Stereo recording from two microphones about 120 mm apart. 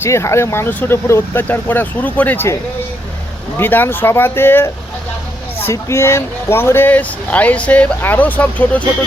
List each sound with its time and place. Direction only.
0.0 s speech: 20° left (ahead or behind)
3.6 s speech: 15° left (ahead or behind)